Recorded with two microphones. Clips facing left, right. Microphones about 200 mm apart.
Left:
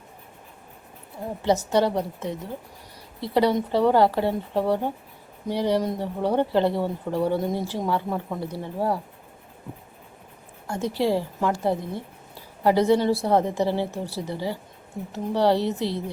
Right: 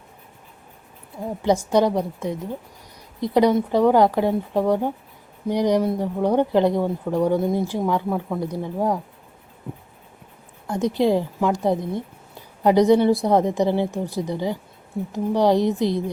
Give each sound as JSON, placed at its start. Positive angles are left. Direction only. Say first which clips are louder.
{"t": 1.4, "sound": "speech", "louder": "right 3 dB", "side_deg": -10}
{"t": 10.7, "sound": "speech", "louder": "right 4 dB", "side_deg": -15}